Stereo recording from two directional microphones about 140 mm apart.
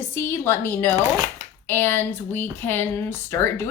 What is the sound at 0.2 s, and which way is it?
Speech, 15° left (ahead or behind).